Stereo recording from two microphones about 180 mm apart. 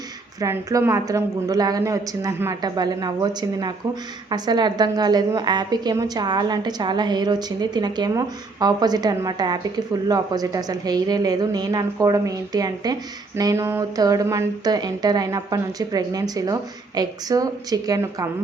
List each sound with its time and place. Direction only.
0.3 s a woman's voice: 15° right (ahead or behind)